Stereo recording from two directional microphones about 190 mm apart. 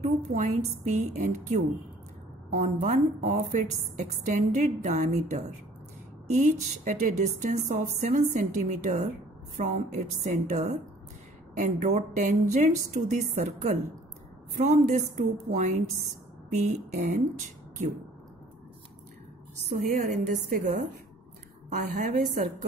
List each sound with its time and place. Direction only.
0.0 s a woman's voice: 40° right (ahead or behind)
19.7 s a woman's voice: 35° right (ahead or behind)
21.7 s a woman's voice: 40° right (ahead or behind)